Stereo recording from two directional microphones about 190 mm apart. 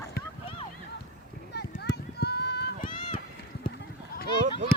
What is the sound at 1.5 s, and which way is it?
Clip-clop, 65° left (ahead or behind).